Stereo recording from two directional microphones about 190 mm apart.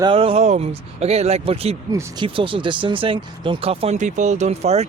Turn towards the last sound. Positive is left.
turn(degrees=-35)  # may be behind; listen again after turning